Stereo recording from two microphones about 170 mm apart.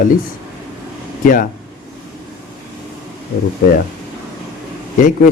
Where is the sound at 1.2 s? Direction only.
55° left (ahead or behind).